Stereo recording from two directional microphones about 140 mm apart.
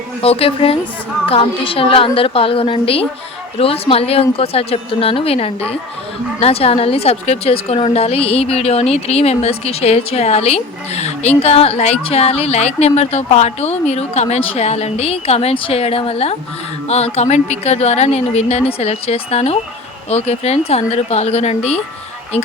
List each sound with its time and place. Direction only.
0.2 s a woman's voice: 45° left (ahead or behind)